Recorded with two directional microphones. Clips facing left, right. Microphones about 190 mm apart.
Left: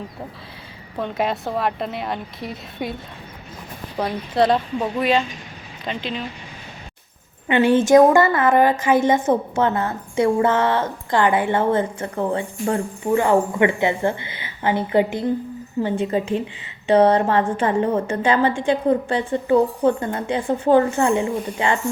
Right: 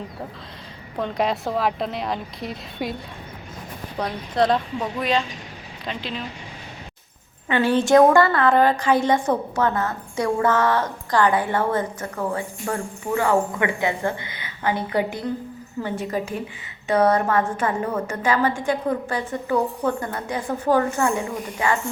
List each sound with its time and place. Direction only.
0.9 s a woman's voice: centre (ahead or behind)
4.0 s a woman's voice: 5° left (ahead or behind)
7.4 s a woman's voice: 20° left (ahead or behind)